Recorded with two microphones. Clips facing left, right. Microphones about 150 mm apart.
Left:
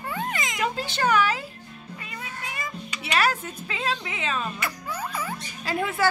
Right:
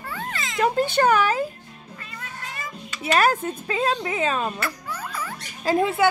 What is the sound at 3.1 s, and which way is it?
A woman's voice, 45° right (ahead or behind).